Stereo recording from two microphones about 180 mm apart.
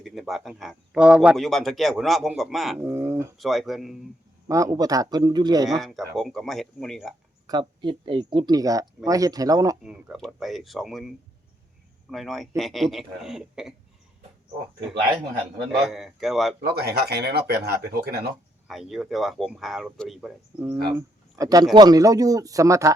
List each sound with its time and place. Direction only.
0.0 s speech: centre (ahead or behind)
2.8 s speech: 15° right (ahead or behind)
3.3 s speech: centre (ahead or behind)
4.4 s a man's voice: 20° right (ahead or behind)
5.8 s speech: centre (ahead or behind)
7.8 s a man's voice: 25° right (ahead or behind)
9.8 s speech: 5° right (ahead or behind)
12.1 s speech: centre (ahead or behind)
15.9 s speech: centre (ahead or behind)
16.6 s speech: 60° right (ahead or behind)
18.7 s speech: centre (ahead or behind)
20.9 s a man's voice: 20° right (ahead or behind)